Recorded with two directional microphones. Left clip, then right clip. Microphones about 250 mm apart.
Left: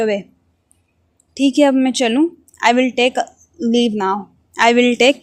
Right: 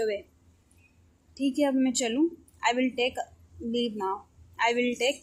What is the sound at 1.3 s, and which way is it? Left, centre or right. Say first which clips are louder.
A woman's voice: left 13 dB; left.